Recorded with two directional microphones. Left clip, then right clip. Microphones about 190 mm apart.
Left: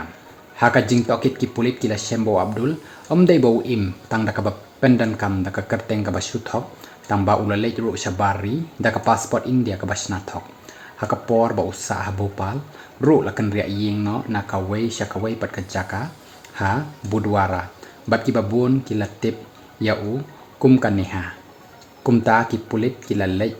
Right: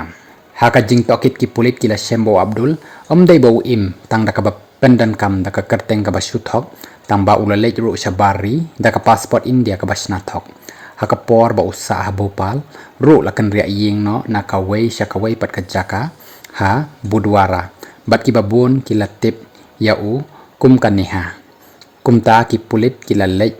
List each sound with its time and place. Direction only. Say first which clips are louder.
0.5 s speech: right 6 dB; 45° right (ahead or behind)
20.6 s speech: right 6 dB; 40° right (ahead or behind)